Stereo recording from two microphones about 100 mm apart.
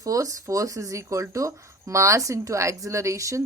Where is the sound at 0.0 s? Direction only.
35° right (ahead or behind).